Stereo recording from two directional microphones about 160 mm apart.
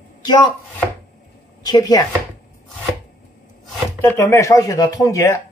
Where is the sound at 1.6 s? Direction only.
25° left (ahead or behind).